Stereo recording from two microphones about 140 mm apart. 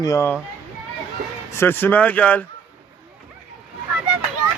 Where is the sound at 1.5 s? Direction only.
15° left (ahead or behind).